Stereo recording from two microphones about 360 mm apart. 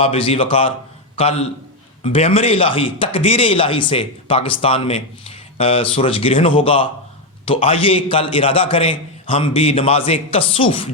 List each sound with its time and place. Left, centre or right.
0.0 s a man's voice: centre